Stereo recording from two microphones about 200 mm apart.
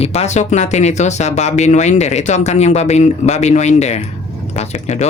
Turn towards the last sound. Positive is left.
turn(degrees=35)  # may be behind; listen again after turning